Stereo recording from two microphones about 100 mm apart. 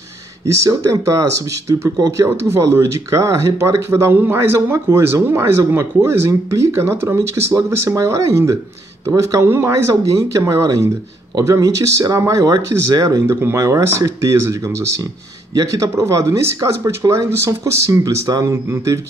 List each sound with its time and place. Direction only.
0.7 s speech: 35° right (ahead or behind)
13.3 s speech: 25° right (ahead or behind)